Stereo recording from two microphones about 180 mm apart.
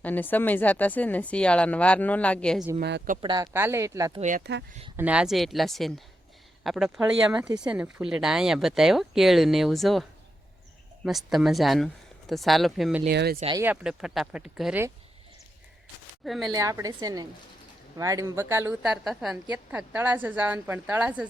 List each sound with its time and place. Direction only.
0.0 s speech: 10° left (ahead or behind)
3.2 s a woman's voice: 25° right (ahead or behind)
3.5 s a woman's voice: 15° right (ahead or behind)
4.2 s speech: 45° right (ahead or behind)
4.9 s speech: 5° right (ahead or behind)
13.1 s speech: 60° right (ahead or behind)
13.6 s speech: 5° right (ahead or behind)
16.2 s speech: centre (ahead or behind)
16.5 s a woman's voice: 20° right (ahead or behind)